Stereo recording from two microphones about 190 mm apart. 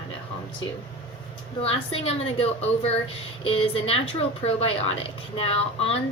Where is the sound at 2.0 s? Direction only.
30° left (ahead or behind).